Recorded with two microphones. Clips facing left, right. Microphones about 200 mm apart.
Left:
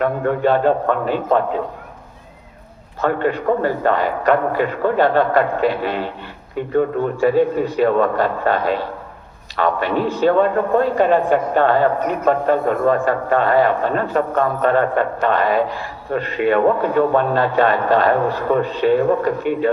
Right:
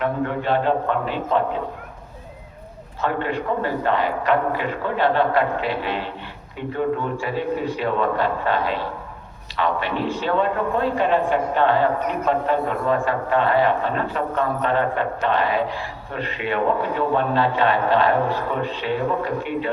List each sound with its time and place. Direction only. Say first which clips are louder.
0.0 s speech: left 6 dB; 45° left (ahead or behind)
3.0 s speech: left 5 dB; 45° left (ahead or behind)